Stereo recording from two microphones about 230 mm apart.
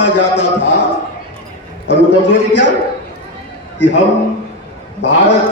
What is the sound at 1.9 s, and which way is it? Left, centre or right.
Speech, left.